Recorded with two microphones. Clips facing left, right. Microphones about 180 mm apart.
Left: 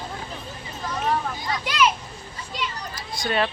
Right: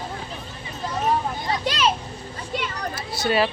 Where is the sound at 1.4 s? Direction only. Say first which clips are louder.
Left 1 dB; 30° right (ahead or behind).